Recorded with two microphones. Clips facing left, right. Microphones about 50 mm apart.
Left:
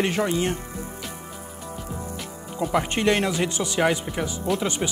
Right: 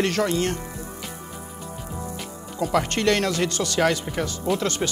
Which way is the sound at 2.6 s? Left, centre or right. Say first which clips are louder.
Right 1 dB; centre.